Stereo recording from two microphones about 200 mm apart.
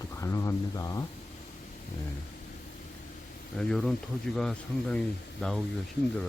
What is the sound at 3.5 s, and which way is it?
Speech, 5° left (ahead or behind).